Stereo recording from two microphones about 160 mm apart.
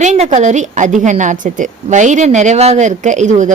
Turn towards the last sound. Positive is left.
turn(degrees=-50)  # may be behind; listen again after turning